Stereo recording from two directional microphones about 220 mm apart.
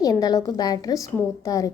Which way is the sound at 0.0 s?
15° left (ahead or behind).